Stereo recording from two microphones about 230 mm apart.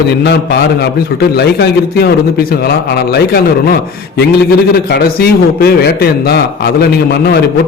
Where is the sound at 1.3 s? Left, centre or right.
Left.